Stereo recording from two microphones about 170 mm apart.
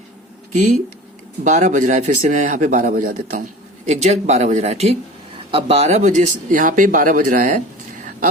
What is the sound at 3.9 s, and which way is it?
Speech, 45° right (ahead or behind).